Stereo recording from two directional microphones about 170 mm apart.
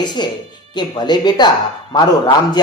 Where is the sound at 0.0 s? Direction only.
25° left (ahead or behind).